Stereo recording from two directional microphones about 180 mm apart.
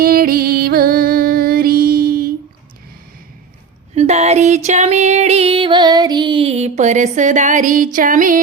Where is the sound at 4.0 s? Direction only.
35° right (ahead or behind).